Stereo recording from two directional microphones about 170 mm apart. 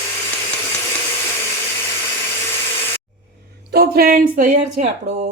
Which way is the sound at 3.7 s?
65° right (ahead or behind).